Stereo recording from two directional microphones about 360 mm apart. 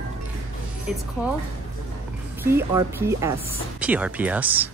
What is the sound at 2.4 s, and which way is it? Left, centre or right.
A woman's voice, centre.